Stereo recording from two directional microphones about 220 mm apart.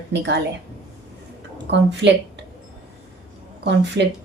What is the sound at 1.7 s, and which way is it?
Speech, 50° right (ahead or behind).